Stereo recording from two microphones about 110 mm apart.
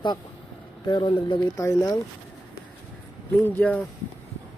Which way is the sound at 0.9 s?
45° left (ahead or behind).